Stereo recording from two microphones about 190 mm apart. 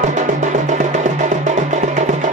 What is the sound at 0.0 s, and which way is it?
Music, 40° right (ahead or behind).